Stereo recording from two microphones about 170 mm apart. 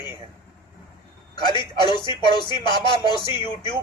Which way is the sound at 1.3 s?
25° left (ahead or behind).